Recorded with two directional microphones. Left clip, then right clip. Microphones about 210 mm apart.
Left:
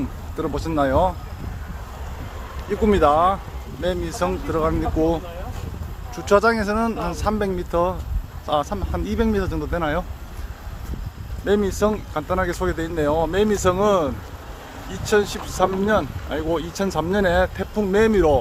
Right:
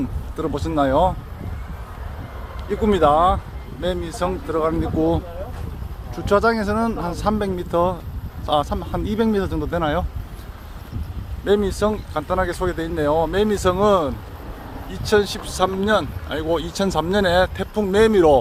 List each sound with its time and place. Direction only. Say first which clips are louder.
0.3 s speech: right 1 dB; 10° right (ahead or behind)
2.6 s speech: right 1 dB; 5° right (ahead or behind)
11.4 s speech: right 1 dB; 10° right (ahead or behind)